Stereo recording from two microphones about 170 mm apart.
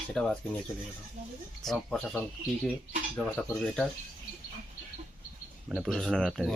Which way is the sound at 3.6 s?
Centre (ahead or behind).